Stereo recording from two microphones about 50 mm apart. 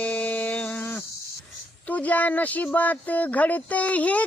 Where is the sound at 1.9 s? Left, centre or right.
Left.